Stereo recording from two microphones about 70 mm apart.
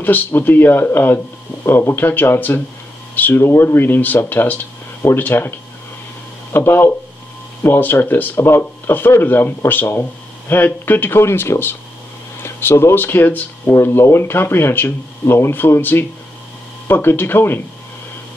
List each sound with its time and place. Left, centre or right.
0.0 s speech: left
6.5 s speech: left